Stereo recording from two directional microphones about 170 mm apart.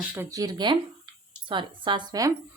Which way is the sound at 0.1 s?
15° right (ahead or behind).